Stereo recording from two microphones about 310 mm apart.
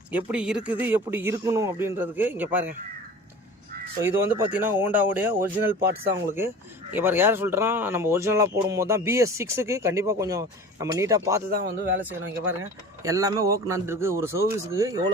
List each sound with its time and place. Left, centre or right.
0.1 s speech: centre
4.0 s speech: centre
11.5 s speech: right
13.0 s speech: centre